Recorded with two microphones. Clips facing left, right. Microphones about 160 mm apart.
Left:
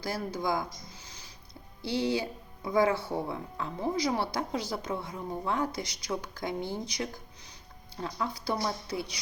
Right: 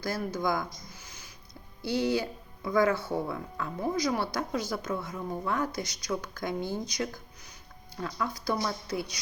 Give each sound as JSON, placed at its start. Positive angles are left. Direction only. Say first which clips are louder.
{"t": 0.1, "sound": "speech", "louder": "right 1 dB", "side_deg": 25}
{"t": 2.0, "sound": "speech", "louder": "right 1 dB", "side_deg": 25}